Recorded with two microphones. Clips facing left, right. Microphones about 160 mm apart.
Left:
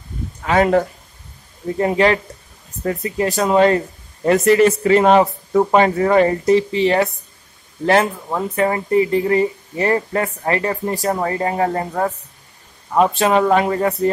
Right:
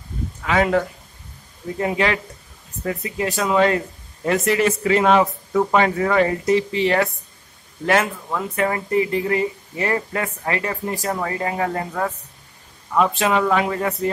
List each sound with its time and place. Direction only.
0.4 s speech: 40° left (ahead or behind)